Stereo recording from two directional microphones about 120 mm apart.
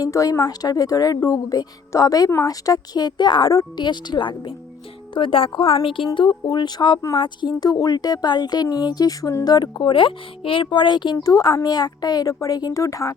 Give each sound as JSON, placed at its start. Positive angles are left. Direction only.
{"t": 0.0, "sound": "a woman's voice", "side_deg": 30}